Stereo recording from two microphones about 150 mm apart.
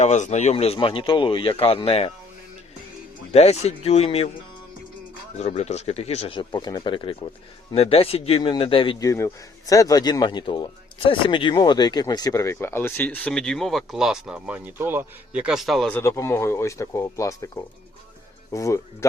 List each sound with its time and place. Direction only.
0.0 s speech: 50° left (ahead or behind)
3.3 s speech: 45° left (ahead or behind)
5.4 s speech: 45° left (ahead or behind)
9.0 s a man's voice: 20° left (ahead or behind); by 15.9 s centre (ahead or behind)
15.9 s a man's voice: 15° left (ahead or behind)